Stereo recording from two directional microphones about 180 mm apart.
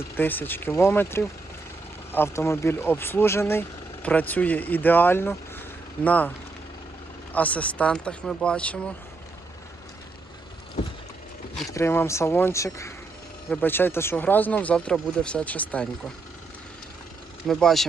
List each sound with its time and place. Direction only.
0.2 s speech: 10° left (ahead or behind)
7.3 s speech: 5° left (ahead or behind)
11.7 s speech: 15° left (ahead or behind)
17.4 s speech: centre (ahead or behind)